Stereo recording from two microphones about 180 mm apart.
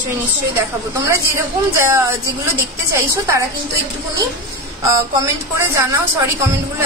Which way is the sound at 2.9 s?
15° right (ahead or behind).